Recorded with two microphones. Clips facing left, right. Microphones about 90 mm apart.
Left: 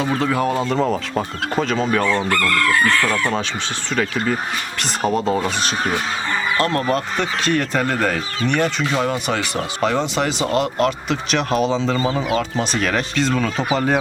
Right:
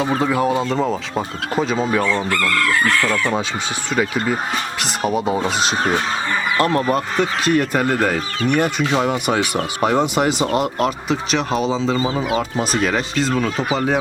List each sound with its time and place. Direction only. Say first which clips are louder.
0.2 s speech: right 1 dB; 10° right (ahead or behind)
3.9 s speech: right 1 dB; 15° right (ahead or behind)
5.4 s speech: right 2 dB; 20° right (ahead or behind); by 14.0 s centre (ahead or behind)